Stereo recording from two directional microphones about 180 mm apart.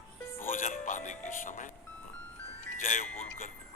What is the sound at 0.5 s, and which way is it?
Music, 45° left (ahead or behind).